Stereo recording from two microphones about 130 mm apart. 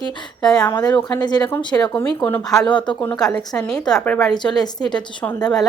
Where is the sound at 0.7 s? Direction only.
35° left (ahead or behind).